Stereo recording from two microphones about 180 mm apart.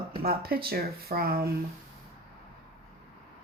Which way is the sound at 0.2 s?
55° right (ahead or behind).